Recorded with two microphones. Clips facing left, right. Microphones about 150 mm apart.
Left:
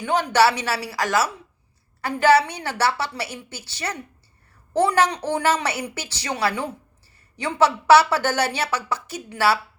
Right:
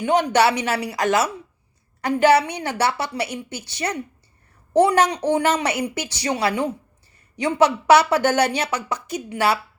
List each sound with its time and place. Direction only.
0.0 s speech: 20° right (ahead or behind)